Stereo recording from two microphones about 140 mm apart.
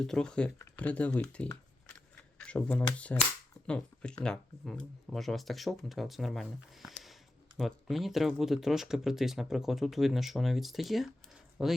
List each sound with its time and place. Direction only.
0.0 s speech: 5° left (ahead or behind)